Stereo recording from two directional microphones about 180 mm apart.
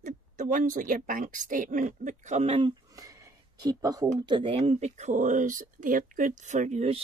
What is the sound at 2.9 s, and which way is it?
Speech, 20° right (ahead or behind).